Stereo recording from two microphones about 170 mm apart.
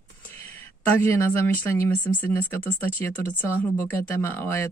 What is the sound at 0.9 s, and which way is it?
Speech, 10° left (ahead or behind).